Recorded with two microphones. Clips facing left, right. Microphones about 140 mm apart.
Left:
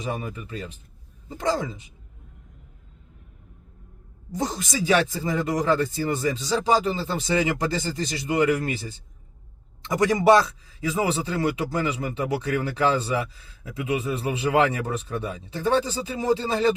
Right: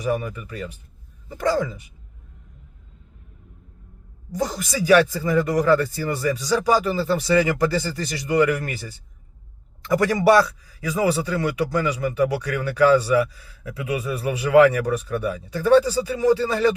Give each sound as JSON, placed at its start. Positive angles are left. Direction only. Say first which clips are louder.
{"t": 0.0, "sound": "a man's voice", "louder": "right 6 dB", "side_deg": 25}
{"t": 4.3, "sound": "a man's voice", "louder": "right 2 dB", "side_deg": 20}